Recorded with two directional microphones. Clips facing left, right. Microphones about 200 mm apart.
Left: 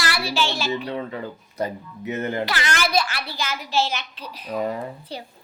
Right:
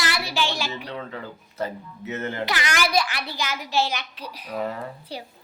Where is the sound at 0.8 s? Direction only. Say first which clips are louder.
Left 5 dB; 15° left (ahead or behind).